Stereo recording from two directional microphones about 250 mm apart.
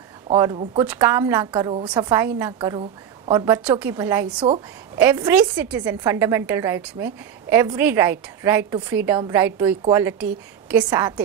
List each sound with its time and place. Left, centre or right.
0.3 s a woman's voice: centre